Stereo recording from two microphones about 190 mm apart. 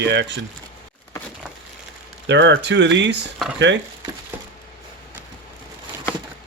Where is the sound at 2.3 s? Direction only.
70° right (ahead or behind).